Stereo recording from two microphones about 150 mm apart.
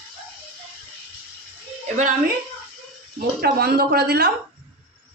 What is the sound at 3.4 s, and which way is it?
Speech, 90° right.